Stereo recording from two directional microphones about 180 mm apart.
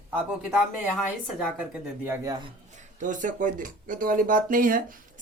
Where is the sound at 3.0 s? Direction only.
45° right (ahead or behind).